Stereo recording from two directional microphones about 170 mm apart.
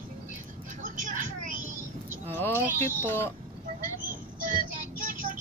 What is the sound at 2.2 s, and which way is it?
Speech, 10° left (ahead or behind).